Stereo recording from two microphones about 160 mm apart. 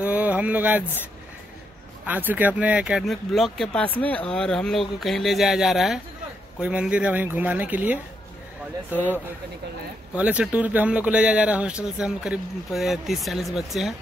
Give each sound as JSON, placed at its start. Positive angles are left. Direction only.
{"t": 0.0, "sound": "a sound", "side_deg": -10}
{"t": 2.0, "sound": "speech", "side_deg": -10}
{"t": 10.1, "sound": "speech", "side_deg": -10}